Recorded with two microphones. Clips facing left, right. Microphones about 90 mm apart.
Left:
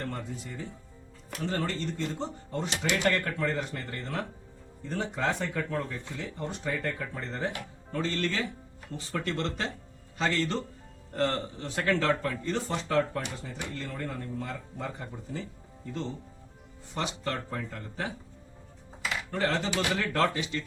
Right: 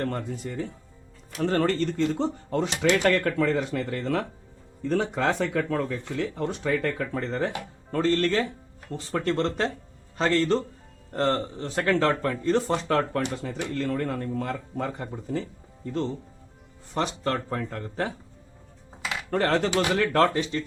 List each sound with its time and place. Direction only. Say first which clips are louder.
0.0 s speech: right 7 dB; 55° right (ahead or behind); by 7.5 s 80° right
7.9 s speech: right 7 dB; 45° right (ahead or behind)
13.0 s speech: right 3 dB; 70° right (ahead or behind)
16.9 s speech: right 6 dB; 45° right (ahead or behind)
19.3 s speech: right 7 dB; 55° right (ahead or behind)
20.1 s speech: right 6 dB; 40° right (ahead or behind)